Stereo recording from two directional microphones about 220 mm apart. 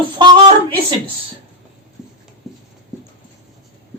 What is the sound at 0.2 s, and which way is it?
Speech, 20° right (ahead or behind).